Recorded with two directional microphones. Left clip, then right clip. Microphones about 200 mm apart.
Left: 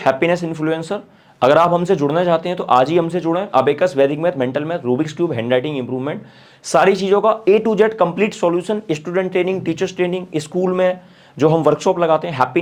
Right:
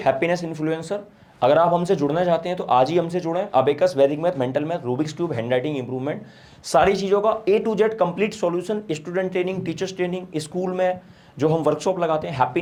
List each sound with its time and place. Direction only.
0.0 s speech: 30° left (ahead or behind)